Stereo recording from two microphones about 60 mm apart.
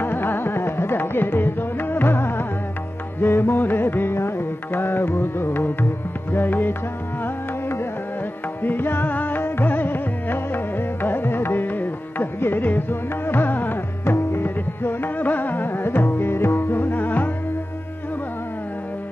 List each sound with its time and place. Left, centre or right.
0.0 s carnatic music: left
3.2 s music: left
8.6 s music: left
16.9 s music: left